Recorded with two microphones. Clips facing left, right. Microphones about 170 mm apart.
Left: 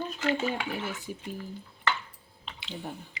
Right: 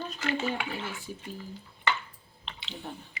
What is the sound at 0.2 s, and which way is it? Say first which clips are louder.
Speech: left 2 dB; 20° left (ahead or behind).